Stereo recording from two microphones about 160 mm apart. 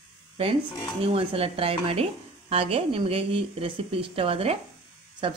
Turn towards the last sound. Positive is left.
turn(degrees=-30)  # may be behind; listen again after turning